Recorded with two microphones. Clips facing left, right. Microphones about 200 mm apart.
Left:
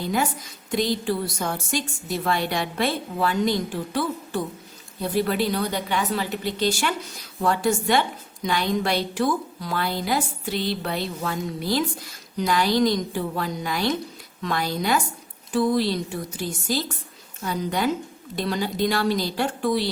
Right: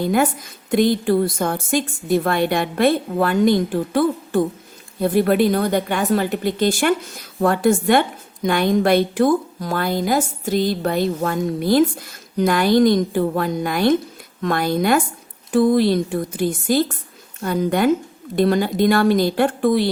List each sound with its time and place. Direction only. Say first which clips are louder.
0.0 s a woman's voice: right 7 dB; 55° right (ahead or behind)